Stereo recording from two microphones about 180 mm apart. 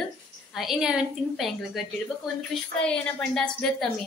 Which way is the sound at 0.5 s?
5° right (ahead or behind).